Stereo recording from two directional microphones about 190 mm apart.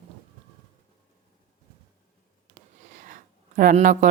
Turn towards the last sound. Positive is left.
turn(degrees=-45)  # may be behind; listen again after turning